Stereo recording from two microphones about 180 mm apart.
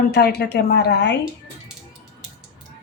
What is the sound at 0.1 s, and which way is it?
A woman's voice, 60° left (ahead or behind).